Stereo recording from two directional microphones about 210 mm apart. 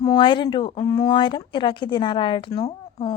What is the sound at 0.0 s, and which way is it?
A woman's voice, 20° left (ahead or behind).